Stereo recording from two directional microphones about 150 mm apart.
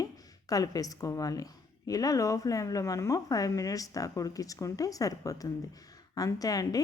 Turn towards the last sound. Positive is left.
turn(degrees=25)  # may be behind; listen again after turning